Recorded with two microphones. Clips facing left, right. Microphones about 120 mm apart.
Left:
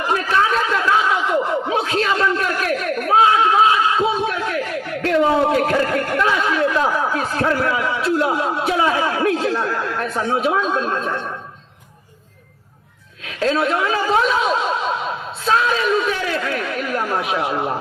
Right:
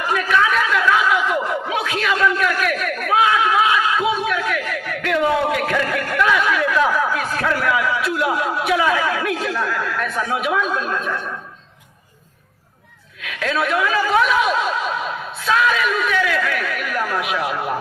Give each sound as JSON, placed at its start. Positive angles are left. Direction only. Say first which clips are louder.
{"t": 0.1, "sound": "snicker", "louder": "even", "side_deg": 30}
{"t": 13.2, "sound": "speech", "louder": "left 3 dB", "side_deg": 30}